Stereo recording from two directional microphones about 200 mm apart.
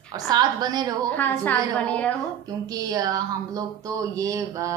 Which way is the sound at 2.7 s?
20° right (ahead or behind).